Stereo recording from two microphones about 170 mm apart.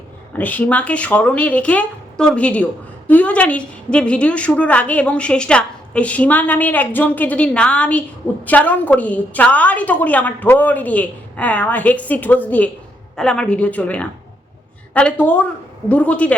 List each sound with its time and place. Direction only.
0.3 s a woman's voice: 10° left (ahead or behind)